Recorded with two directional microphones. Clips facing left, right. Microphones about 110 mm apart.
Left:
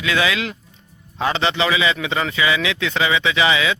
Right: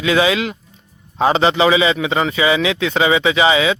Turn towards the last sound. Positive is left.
turn(degrees=-25)  # may be behind; listen again after turning